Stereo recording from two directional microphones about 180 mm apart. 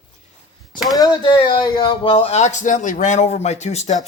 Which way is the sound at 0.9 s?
25° left (ahead or behind).